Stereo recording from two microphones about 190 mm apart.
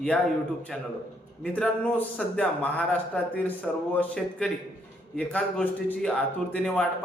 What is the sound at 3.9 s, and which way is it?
A man's voice, 5° left (ahead or behind).